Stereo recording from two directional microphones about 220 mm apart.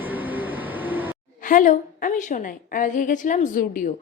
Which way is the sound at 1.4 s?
35° left (ahead or behind).